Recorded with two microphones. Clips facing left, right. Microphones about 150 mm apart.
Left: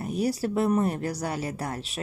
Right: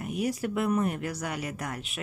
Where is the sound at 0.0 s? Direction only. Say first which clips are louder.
Left 3 dB; 35° left (ahead or behind).